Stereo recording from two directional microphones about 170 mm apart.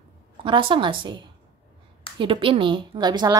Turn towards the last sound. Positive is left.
turn(degrees=-25)  # may be behind; listen again after turning